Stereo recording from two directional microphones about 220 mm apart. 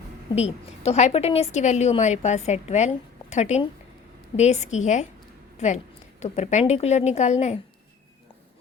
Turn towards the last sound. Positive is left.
turn(degrees=30)  # may be behind; listen again after turning